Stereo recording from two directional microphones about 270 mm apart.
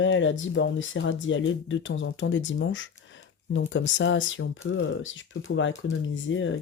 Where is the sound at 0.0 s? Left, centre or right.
Left.